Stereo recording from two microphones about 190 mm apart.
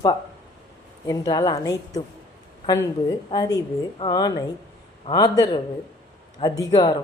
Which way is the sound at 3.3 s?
20° left (ahead or behind).